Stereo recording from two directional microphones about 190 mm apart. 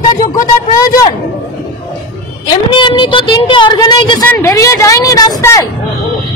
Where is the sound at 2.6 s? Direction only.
25° left (ahead or behind).